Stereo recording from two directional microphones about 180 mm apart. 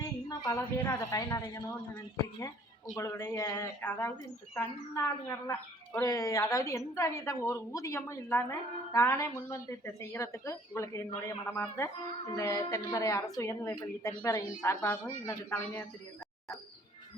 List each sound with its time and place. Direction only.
0.0 s a woman's voice: 20° left (ahead or behind)